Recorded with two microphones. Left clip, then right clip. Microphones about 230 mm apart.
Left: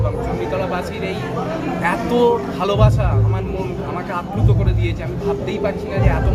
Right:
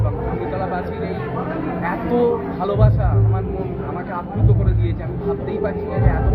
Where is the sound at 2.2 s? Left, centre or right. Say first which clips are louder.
Left 3 dB; left.